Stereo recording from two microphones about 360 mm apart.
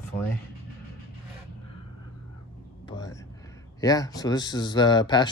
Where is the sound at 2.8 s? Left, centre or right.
Centre.